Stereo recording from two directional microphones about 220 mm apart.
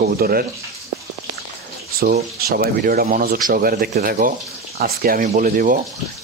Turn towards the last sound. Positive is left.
turn(degrees=-40)  # may be behind; listen again after turning